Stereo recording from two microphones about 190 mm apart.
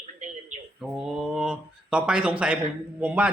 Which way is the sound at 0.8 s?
Centre (ahead or behind).